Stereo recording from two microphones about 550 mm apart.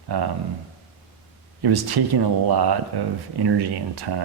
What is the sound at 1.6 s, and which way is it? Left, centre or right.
Speech, right.